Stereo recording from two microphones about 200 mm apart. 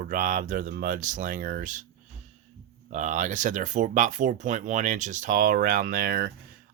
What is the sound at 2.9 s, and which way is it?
Speech, 40° right (ahead or behind).